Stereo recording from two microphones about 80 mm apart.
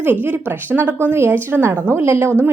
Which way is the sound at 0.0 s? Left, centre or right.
Right.